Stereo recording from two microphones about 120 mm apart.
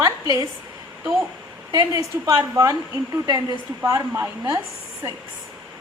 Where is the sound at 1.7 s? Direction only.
30° right (ahead or behind).